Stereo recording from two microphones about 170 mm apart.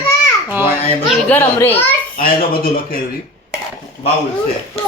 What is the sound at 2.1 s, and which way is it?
Speech, 60° left (ahead or behind).